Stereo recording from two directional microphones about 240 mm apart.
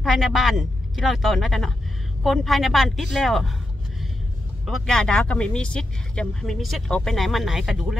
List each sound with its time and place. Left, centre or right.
0.0 s speech: centre
4.6 s speech: centre